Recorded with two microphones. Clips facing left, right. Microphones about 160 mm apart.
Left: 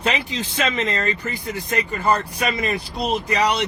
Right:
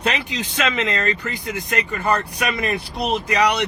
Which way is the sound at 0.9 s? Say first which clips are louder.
Right 1 dB; 70° right (ahead or behind).